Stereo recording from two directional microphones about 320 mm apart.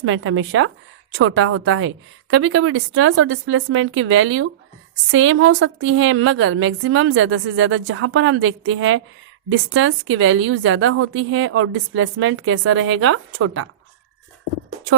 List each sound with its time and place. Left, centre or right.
0.0 s a woman's voice: right